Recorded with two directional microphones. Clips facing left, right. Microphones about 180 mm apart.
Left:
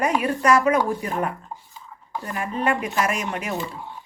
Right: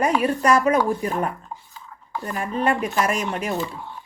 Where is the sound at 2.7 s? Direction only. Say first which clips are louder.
Right 1 dB; 35° right (ahead or behind).